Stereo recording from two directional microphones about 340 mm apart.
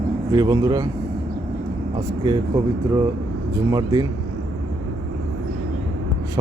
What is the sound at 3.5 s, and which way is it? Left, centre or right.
Speech, centre.